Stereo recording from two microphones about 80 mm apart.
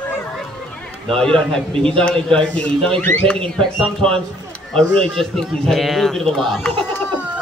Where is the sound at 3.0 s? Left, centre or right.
Left.